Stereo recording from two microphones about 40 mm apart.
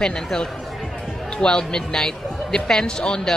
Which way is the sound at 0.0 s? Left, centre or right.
Centre.